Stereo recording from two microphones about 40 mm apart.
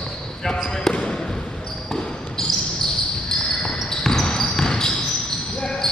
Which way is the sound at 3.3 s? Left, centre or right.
Centre.